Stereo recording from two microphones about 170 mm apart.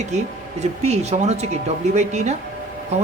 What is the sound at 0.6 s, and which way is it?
Speech, 40° right (ahead or behind).